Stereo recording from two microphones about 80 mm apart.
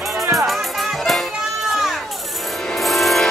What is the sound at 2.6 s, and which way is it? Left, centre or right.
Music, centre.